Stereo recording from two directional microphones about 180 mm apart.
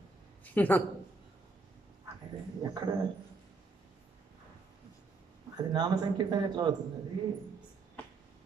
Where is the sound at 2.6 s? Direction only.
25° right (ahead or behind).